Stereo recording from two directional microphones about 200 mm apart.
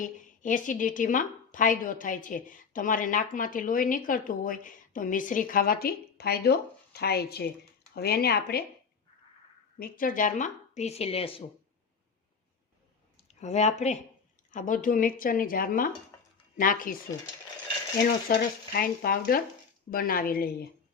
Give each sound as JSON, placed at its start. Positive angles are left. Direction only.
{"t": 0.0, "sound": "a woman's voice", "side_deg": 40}
{"t": 9.7, "sound": "speech", "side_deg": 45}
{"t": 13.1, "sound": "a woman's voice", "side_deg": 35}
{"t": 16.1, "sound": "a sound", "side_deg": 15}
{"t": 16.6, "sound": "a woman's voice", "side_deg": 45}
{"t": 18.3, "sound": "a woman's voice", "side_deg": 45}